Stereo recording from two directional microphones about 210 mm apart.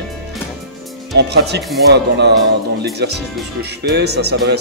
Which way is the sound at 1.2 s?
55° right (ahead or behind).